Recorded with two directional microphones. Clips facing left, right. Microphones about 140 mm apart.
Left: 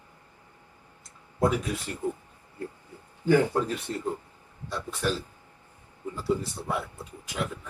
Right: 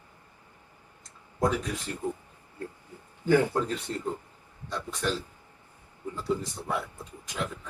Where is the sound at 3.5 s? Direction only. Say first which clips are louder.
Left 1 dB; 10° left (ahead or behind).